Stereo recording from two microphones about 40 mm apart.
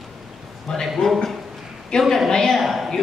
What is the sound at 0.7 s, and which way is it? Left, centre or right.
Speech, centre.